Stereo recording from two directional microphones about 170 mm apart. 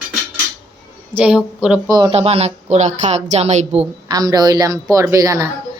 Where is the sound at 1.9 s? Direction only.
25° right (ahead or behind).